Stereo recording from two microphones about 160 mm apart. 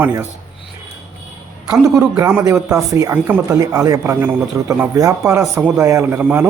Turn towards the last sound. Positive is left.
turn(degrees=-10)  # may be behind; listen again after turning